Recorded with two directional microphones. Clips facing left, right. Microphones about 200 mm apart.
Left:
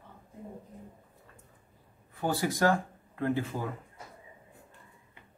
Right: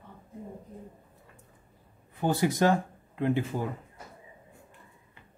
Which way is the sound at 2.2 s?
20° right (ahead or behind).